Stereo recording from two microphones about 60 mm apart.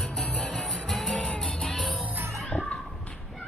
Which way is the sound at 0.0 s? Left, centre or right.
Left.